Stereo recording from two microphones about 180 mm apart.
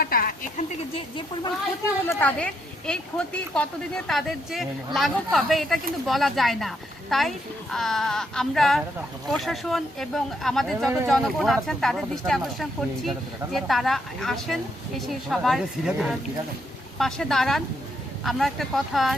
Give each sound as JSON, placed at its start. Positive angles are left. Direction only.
{"t": 0.0, "sound": "speech", "side_deg": 55}
{"t": 2.0, "sound": "speech", "side_deg": 10}